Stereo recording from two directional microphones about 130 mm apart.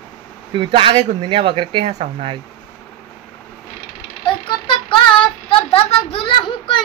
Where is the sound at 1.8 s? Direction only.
55° right (ahead or behind).